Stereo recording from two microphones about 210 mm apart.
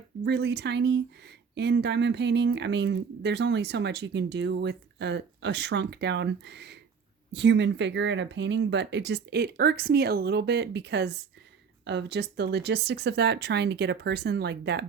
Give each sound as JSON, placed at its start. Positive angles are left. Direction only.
{"t": 0.3, "sound": "speech", "side_deg": -55}